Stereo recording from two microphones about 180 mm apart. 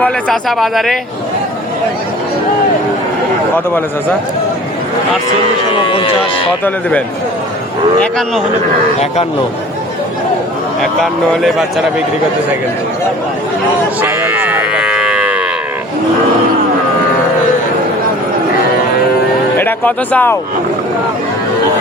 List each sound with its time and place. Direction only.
0.0 s speech: centre (ahead or behind)
5.9 s speech: 30° left (ahead or behind)
11.0 s speech: centre (ahead or behind)
14.0 s sheep: 10° right (ahead or behind)
19.5 s speech: 10° left (ahead or behind)